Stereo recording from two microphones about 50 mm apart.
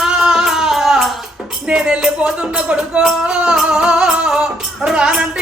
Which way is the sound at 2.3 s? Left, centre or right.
Centre.